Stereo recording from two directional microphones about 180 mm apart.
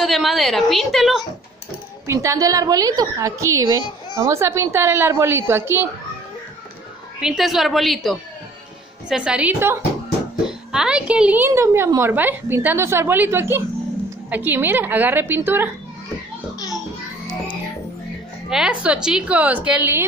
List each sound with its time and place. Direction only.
0.0 s a woman's voice: centre (ahead or behind)
2.0 s a woman's voice: 15° right (ahead or behind)
7.2 s a woman's voice: centre (ahead or behind)
16.5 s a sound: 20° left (ahead or behind)
18.5 s a woman's voice: 5° right (ahead or behind)